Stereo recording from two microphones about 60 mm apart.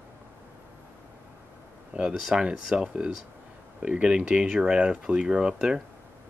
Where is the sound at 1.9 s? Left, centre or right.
Right.